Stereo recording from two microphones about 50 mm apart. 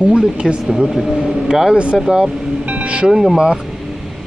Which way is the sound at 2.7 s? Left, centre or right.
Right.